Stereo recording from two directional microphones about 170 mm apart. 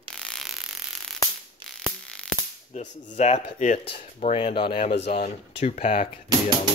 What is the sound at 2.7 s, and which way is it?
Speech, 45° left (ahead or behind).